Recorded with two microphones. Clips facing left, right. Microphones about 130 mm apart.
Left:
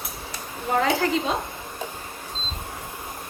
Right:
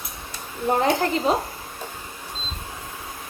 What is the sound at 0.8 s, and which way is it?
Speech, 25° right (ahead or behind).